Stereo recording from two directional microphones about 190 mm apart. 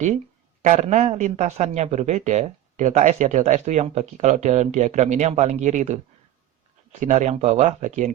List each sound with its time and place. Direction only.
0.6 s speech: 40° right (ahead or behind)
7.0 s speech: 40° right (ahead or behind)